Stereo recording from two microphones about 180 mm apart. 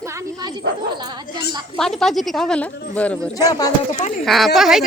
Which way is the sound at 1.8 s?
Centre (ahead or behind).